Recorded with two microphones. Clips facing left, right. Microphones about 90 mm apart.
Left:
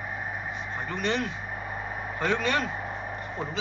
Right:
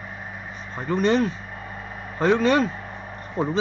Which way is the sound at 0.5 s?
35° right (ahead or behind).